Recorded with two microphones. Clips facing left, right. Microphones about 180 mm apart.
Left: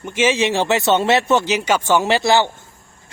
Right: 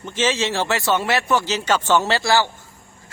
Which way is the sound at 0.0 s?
15° left (ahead or behind).